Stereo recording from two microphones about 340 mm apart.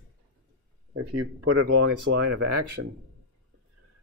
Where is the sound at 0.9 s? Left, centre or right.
Right.